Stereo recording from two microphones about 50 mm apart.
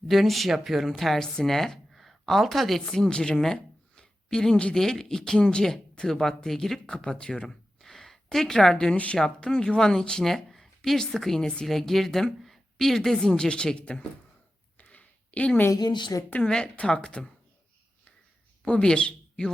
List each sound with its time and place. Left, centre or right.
0.1 s speech: centre
1.2 s speech: centre
14.8 s a sound: left
16.4 s speech: centre
18.6 s speech: centre